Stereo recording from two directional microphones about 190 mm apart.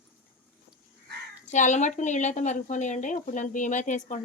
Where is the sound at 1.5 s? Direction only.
40° left (ahead or behind).